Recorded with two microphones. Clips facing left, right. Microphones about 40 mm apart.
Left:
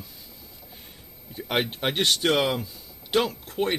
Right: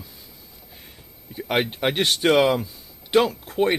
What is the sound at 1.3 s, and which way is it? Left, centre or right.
Speech, centre.